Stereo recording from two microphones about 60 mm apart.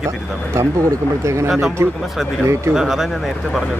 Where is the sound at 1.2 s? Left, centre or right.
Right.